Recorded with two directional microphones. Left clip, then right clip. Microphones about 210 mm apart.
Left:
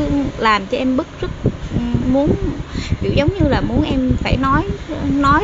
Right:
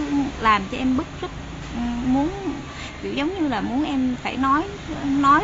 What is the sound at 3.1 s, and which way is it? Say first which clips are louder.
A woman's voice: left 7 dB; 25° left (ahead or behind).